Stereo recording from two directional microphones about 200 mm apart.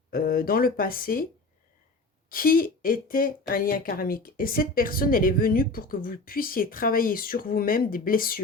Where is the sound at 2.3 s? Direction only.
45° left (ahead or behind).